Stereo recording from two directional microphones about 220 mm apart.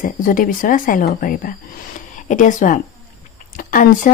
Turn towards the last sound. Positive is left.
turn(degrees=35)  # may be behind; listen again after turning